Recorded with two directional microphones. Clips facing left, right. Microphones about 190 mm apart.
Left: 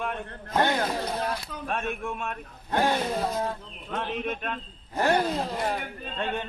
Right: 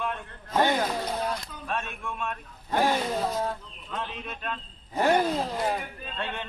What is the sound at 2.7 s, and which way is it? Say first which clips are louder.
Speech: even; 10° right (ahead or behind).